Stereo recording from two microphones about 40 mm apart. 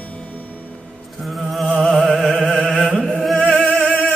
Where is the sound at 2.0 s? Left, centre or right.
Centre.